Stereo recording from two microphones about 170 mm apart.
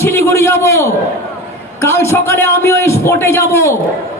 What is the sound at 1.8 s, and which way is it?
A man's voice, 15° left (ahead or behind).